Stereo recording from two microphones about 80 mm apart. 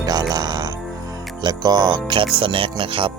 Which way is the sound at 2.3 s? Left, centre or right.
Right.